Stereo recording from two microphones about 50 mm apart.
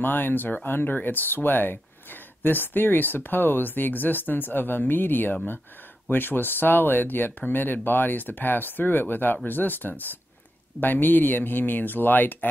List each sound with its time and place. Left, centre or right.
0.0 s speech: left